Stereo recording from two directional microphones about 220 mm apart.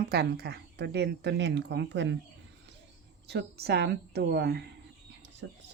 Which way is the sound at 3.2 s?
50° right (ahead or behind).